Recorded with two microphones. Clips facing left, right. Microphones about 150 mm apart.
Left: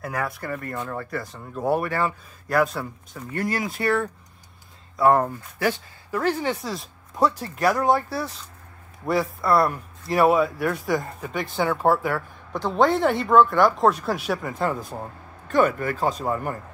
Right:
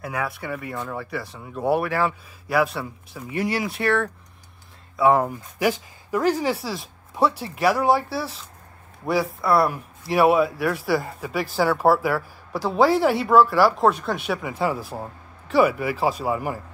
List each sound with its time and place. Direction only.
0.0 s speech: centre (ahead or behind)
5.3 s speech: 15° right (ahead or behind)